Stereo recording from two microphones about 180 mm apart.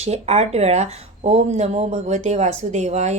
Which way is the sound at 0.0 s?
35° right (ahead or behind).